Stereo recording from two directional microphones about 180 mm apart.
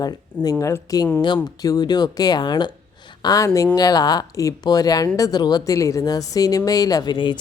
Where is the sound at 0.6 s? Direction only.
20° left (ahead or behind).